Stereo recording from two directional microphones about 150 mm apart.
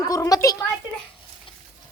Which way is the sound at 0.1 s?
20° left (ahead or behind).